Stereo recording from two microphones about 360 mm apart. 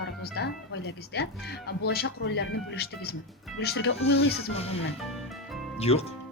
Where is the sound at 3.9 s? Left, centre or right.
Centre.